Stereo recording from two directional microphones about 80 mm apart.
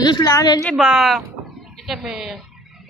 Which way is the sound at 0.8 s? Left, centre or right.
Centre.